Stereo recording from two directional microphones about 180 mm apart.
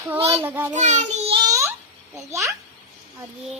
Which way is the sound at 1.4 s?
15° right (ahead or behind).